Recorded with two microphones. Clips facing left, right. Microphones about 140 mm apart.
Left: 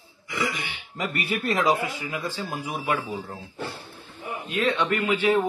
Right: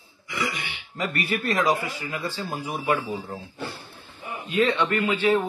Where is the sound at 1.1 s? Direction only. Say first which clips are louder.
Even; 20° left (ahead or behind).